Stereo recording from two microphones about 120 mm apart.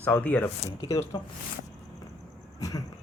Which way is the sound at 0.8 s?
25° left (ahead or behind).